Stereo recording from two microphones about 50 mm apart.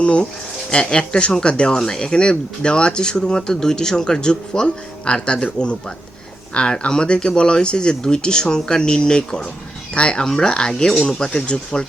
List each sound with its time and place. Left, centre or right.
0.0 s speech: left
6.5 s speech: centre